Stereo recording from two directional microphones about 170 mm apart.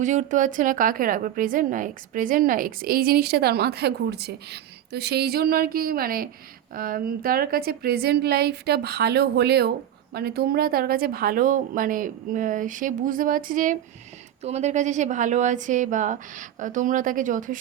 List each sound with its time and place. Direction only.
0.0 s a woman's voice: 45° right (ahead or behind)
14.4 s a woman's voice: 40° right (ahead or behind)